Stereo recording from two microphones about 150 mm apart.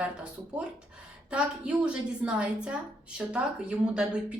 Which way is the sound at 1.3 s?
10° right (ahead or behind).